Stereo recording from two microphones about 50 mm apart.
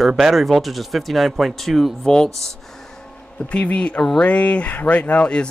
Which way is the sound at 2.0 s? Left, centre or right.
Centre.